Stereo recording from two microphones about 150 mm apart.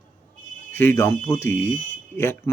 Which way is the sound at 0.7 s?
15° left (ahead or behind).